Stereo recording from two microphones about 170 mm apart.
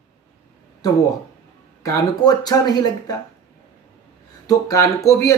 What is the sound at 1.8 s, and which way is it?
Speech, 20° left (ahead or behind).